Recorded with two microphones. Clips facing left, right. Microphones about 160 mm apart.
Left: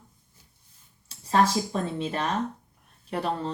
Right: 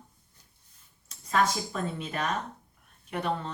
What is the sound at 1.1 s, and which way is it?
Speech, 30° left (ahead or behind).